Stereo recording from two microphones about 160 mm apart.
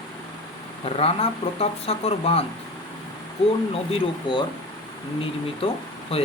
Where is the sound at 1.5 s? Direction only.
40° left (ahead or behind).